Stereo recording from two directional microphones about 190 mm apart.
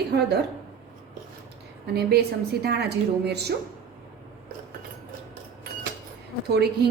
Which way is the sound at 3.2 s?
60° right (ahead or behind).